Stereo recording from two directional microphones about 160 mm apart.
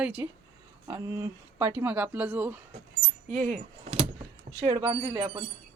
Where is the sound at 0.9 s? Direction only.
20° right (ahead or behind).